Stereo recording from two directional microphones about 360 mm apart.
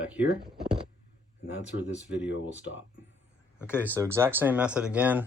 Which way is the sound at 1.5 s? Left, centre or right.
Left.